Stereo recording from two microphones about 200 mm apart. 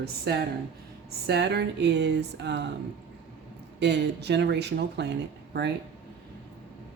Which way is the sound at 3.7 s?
60° right (ahead or behind).